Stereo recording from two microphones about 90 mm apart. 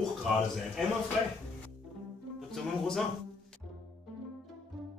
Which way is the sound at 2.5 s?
Centre (ahead or behind).